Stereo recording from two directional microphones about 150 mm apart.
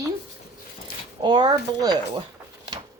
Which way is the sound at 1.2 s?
30° right (ahead or behind).